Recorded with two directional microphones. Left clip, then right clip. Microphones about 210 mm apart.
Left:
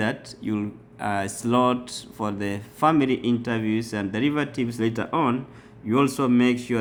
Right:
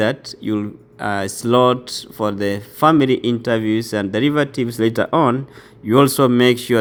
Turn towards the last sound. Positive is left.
turn(degrees=-35)  # may be behind; listen again after turning